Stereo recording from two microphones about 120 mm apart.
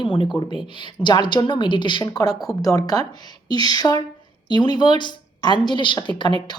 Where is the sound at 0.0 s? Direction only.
45° left (ahead or behind).